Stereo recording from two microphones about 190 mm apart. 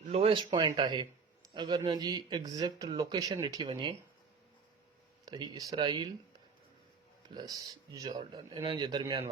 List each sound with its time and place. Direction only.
0.0 s speech: 30° right (ahead or behind)
5.2 s speech: 20° right (ahead or behind)
8.0 s speech: 25° right (ahead or behind)